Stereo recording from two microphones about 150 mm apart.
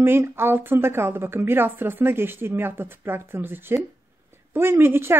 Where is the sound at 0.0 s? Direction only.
15° right (ahead or behind).